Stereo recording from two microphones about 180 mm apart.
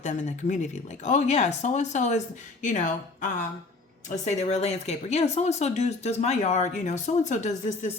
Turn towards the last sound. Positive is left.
turn(degrees=40)  # may be behind; listen again after turning